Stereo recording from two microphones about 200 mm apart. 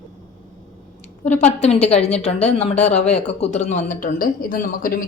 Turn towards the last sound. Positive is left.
turn(degrees=45)  # may be behind; listen again after turning